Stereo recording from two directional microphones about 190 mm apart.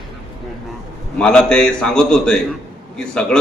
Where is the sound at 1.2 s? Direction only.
5° left (ahead or behind).